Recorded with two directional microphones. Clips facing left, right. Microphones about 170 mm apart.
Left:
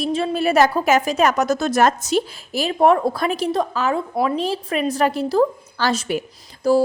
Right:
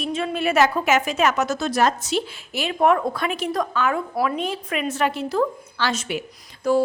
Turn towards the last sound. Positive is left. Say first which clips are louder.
# left 3 dB
turn(degrees=35)  # may be behind; listen again after turning